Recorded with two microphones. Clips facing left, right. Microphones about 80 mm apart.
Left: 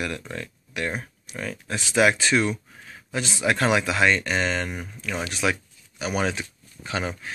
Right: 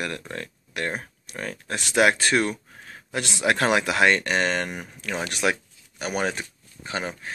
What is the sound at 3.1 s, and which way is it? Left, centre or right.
Speech, right.